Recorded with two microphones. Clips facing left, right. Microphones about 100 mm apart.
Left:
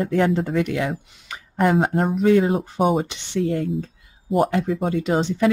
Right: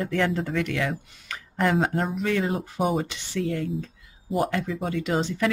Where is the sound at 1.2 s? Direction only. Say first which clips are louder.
Left 5 dB; 20° left (ahead or behind).